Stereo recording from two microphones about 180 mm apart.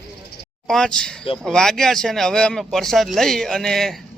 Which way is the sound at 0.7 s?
5° left (ahead or behind).